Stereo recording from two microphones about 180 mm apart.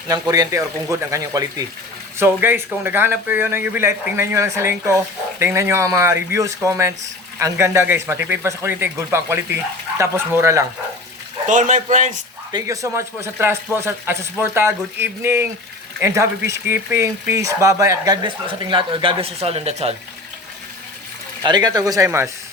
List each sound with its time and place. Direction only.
0.1 s speech: 20° right (ahead or behind)
11.4 s a man's voice: 45° right (ahead or behind)
12.5 s speech: 20° right (ahead or behind)
21.4 s speech: 20° right (ahead or behind)